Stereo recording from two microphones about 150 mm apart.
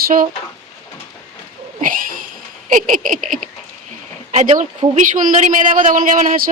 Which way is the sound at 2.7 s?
60° right (ahead or behind).